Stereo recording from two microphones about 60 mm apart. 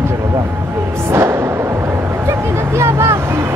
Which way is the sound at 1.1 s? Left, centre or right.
Right.